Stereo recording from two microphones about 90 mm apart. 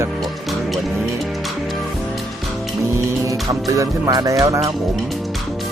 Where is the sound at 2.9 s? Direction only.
35° right (ahead or behind).